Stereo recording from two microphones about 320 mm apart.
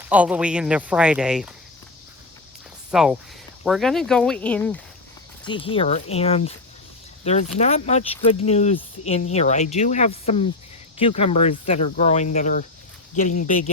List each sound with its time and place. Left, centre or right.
0.0 s speech: centre
2.9 s speech: centre
5.5 s speech: centre